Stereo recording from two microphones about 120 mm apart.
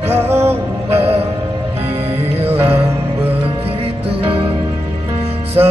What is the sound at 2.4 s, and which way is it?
Music, 55° right (ahead or behind).